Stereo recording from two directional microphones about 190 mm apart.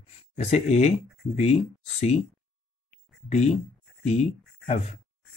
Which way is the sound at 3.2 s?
35° left (ahead or behind).